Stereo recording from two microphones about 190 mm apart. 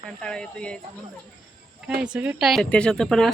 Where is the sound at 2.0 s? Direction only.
5° right (ahead or behind).